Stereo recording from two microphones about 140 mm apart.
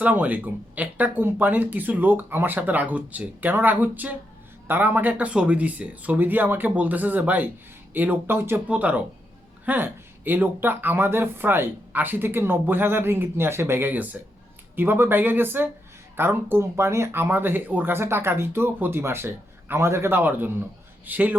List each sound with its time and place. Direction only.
0.0 s speech: 10° right (ahead or behind)